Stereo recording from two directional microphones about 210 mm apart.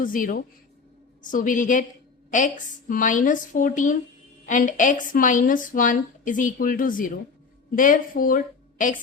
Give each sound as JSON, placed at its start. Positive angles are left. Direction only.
{"t": 0.0, "sound": "a woman's voice", "side_deg": 40}